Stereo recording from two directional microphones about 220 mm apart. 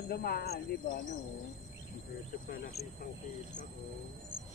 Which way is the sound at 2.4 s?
40° left (ahead or behind).